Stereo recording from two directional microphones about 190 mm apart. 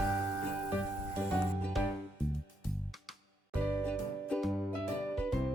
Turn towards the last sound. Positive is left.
turn(degrees=5)  # may be behind; listen again after turning